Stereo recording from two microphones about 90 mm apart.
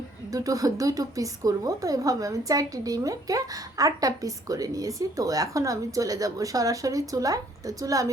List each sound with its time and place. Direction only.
0.3 s speech: 40° right (ahead or behind)